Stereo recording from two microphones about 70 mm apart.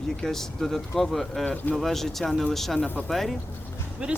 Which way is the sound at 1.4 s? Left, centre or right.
Left.